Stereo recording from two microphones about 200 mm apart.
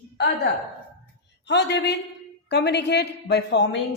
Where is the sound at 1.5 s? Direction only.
60° left (ahead or behind).